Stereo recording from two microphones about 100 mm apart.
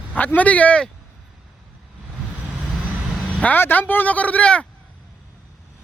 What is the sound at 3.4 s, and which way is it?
Speech, 20° left (ahead or behind).